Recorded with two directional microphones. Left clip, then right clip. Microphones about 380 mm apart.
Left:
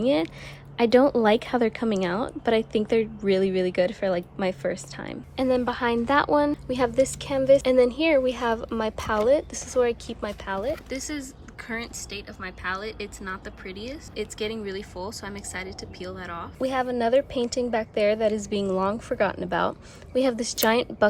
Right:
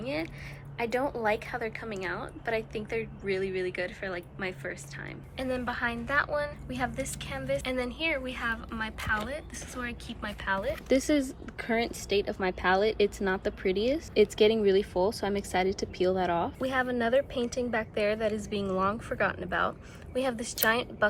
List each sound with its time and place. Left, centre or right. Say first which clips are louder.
0.0 s a woman's voice: left 11 dB; centre
10.8 s a woman's voice: right 7 dB; centre
16.9 s a woman's voice: left 5 dB; centre